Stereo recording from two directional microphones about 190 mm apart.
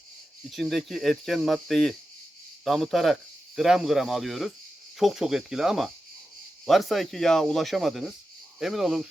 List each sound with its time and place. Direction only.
0.5 s speech: centre (ahead or behind)